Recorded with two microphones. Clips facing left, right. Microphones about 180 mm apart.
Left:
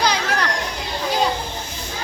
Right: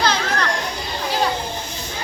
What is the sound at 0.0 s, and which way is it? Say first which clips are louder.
Children playing: even; 15° left (ahead or behind).